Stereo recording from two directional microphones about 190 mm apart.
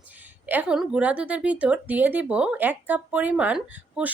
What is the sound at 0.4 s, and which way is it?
A woman's voice, 10° right (ahead or behind).